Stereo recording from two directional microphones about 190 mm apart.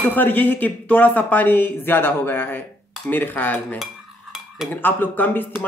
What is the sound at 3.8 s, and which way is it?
Stir, centre (ahead or behind).